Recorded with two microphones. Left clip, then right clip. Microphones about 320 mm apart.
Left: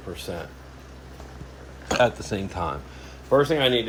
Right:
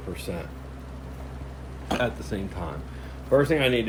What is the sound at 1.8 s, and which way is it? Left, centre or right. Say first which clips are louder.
Speech: left 6 dB; left.